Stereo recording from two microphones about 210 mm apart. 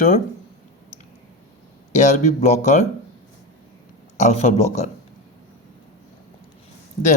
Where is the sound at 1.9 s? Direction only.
35° left (ahead or behind).